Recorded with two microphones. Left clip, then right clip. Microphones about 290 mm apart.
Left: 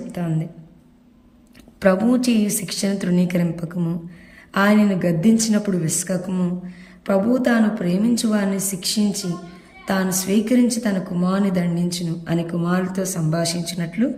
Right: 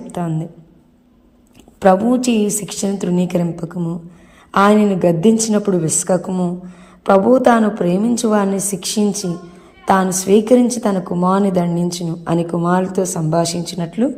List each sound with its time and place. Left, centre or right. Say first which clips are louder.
0.1 s a woman's voice: right 5 dB; centre
1.8 s a woman's voice: right 5 dB; centre
4.5 s a woman's voice: right 6 dB; centre